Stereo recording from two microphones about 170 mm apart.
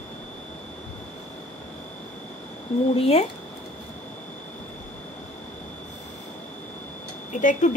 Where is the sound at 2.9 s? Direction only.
35° left (ahead or behind).